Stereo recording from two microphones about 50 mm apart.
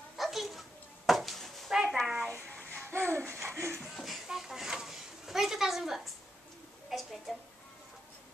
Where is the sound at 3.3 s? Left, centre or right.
Right.